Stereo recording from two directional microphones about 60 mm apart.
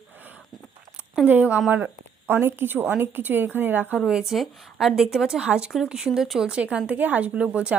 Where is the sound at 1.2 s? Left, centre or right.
Right.